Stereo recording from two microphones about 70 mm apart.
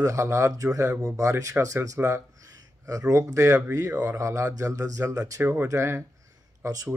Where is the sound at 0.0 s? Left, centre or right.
Right.